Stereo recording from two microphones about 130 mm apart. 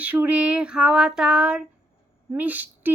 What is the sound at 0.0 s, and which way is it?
Speech, 10° right (ahead or behind).